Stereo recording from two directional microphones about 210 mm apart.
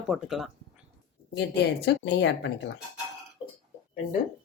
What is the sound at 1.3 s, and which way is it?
A woman's voice, 50° left (ahead or behind).